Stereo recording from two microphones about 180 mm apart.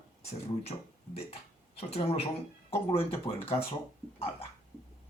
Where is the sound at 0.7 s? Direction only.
35° left (ahead or behind).